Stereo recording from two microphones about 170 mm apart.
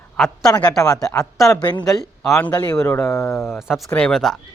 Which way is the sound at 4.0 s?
5° left (ahead or behind).